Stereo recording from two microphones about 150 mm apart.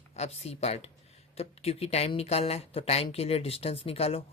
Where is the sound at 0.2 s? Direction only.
45° left (ahead or behind).